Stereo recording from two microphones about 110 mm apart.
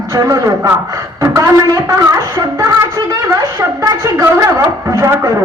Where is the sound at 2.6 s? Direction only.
30° right (ahead or behind).